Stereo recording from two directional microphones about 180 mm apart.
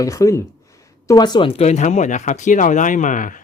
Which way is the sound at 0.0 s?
15° left (ahead or behind).